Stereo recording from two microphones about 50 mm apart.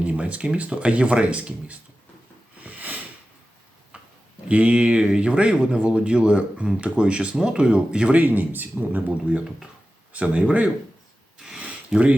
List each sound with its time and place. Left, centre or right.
0.0 s speech: right
2.6 s a sound: right
4.4 s speech: right
8.2 s speech: right
11.9 s speech: centre